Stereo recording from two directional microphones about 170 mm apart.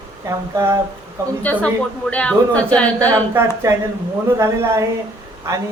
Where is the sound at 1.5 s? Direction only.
10° left (ahead or behind).